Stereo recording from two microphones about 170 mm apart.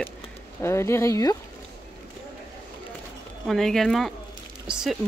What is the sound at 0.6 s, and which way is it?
Speech, 15° left (ahead or behind).